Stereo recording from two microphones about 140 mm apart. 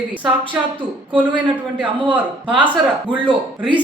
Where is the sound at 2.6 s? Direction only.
10° right (ahead or behind).